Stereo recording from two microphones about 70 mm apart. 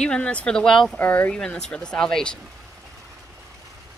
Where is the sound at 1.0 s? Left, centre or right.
Left.